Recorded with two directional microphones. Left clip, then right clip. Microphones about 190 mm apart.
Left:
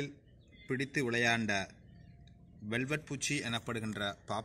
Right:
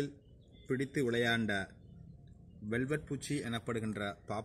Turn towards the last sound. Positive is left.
turn(degrees=20)  # may be behind; listen again after turning